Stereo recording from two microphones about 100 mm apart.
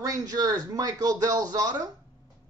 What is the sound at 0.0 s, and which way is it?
Speech, 35° right (ahead or behind).